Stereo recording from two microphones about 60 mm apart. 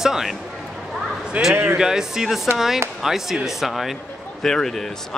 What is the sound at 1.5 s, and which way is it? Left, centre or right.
Speech, right.